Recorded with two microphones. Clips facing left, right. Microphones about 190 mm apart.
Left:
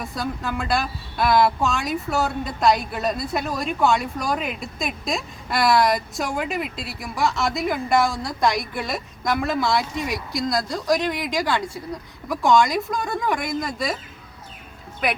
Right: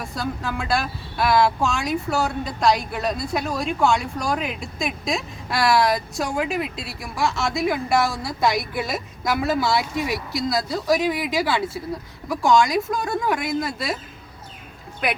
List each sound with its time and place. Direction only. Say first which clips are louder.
0.0 s speech: even; centre (ahead or behind)